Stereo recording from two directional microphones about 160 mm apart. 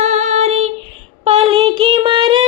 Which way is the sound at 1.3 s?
30° right (ahead or behind).